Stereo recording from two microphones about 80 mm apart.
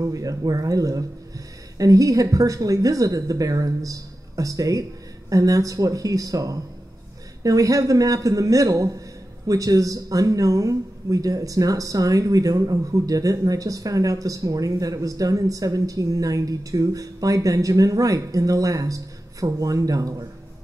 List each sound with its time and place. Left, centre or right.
0.0 s speech: right